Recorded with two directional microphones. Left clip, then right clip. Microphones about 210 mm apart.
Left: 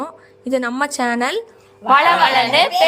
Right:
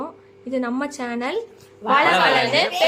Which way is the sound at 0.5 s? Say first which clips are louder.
Left 6 dB; 45° left (ahead or behind).